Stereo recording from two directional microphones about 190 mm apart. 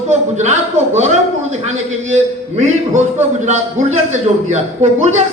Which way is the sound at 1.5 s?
35° right (ahead or behind).